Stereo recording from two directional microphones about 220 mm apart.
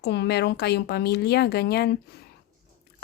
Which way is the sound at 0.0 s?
50° left (ahead or behind).